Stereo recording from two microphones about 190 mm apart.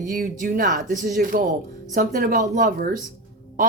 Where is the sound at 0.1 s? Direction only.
45° right (ahead or behind).